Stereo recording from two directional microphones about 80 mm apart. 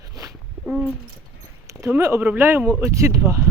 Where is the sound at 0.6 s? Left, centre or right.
Centre.